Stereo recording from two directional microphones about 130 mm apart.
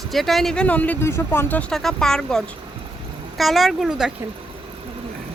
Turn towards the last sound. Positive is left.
turn(degrees=-5)  # may be behind; listen again after turning